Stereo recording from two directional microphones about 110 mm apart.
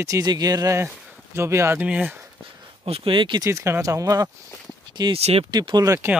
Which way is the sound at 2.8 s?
60° right (ahead or behind).